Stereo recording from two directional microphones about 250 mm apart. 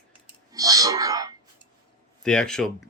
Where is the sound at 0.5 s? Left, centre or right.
Centre.